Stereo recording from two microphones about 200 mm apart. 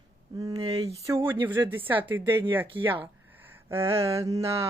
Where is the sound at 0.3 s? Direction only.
20° right (ahead or behind).